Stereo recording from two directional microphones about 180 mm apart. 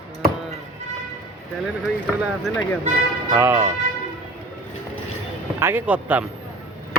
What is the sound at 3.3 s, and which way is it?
Speech, 15° right (ahead or behind).